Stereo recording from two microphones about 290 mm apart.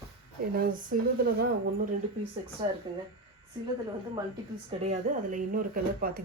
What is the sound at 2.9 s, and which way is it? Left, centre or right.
Speech, centre.